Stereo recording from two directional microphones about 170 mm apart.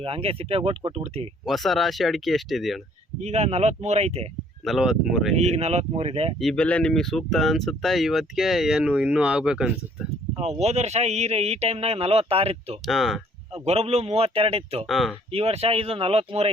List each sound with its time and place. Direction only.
0.0 s speech: 35° right (ahead or behind)
1.5 s speech: centre (ahead or behind)
3.2 s speech: 40° right (ahead or behind)
4.6 s speech: centre (ahead or behind)
5.4 s speech: 40° right (ahead or behind)
6.4 s speech: 5° left (ahead or behind)
10.3 s speech: 40° right (ahead or behind)
12.8 s speech: centre (ahead or behind)
13.5 s speech: 35° right (ahead or behind)
14.8 s speech: centre (ahead or behind)
15.3 s speech: 35° right (ahead or behind)